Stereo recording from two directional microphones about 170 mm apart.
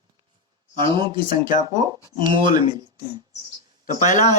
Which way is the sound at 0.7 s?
25° right (ahead or behind).